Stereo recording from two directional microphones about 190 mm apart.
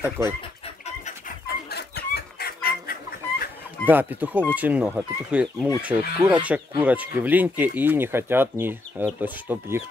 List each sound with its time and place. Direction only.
0.2 s speech: 15° right (ahead or behind)
1.5 s chicken: 55° left (ahead or behind)
3.8 s speech: 10° right (ahead or behind)